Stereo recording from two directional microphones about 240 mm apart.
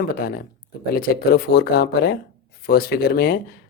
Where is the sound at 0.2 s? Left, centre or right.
Left.